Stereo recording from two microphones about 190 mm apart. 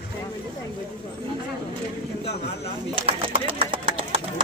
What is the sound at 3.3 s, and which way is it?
Speech, 30° right (ahead or behind).